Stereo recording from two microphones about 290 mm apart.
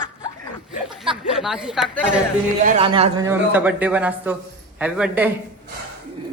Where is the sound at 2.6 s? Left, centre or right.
Centre.